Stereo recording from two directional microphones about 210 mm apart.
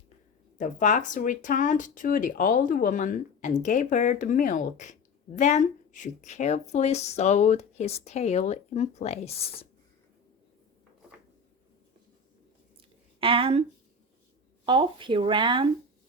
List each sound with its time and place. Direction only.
0.6 s speech: 40° left (ahead or behind)
13.1 s a woman's voice: 25° right (ahead or behind)